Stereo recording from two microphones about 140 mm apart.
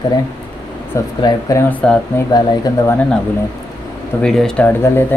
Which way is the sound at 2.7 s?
25° left (ahead or behind).